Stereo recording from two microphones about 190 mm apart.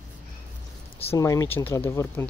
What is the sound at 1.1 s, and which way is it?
Speech, 15° left (ahead or behind).